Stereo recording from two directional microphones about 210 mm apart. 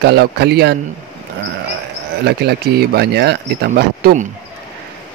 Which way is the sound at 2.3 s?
50° right (ahead or behind).